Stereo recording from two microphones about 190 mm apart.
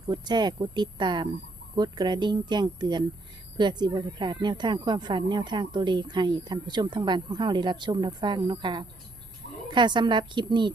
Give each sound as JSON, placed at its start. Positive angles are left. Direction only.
{"t": 0.1, "sound": "speech", "side_deg": -25}